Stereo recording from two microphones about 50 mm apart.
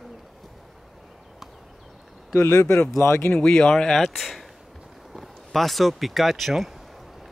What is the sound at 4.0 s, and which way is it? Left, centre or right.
Speech, centre.